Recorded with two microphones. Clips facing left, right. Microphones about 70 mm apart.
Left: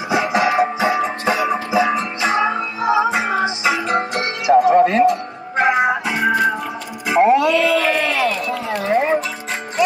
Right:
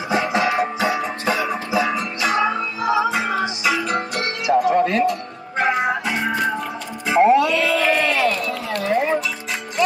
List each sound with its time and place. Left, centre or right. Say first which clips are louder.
0.1 s music: left 3 dB; centre
7.1 s music: left 1 dB; centre
8.5 s a sound: left 2 dB; left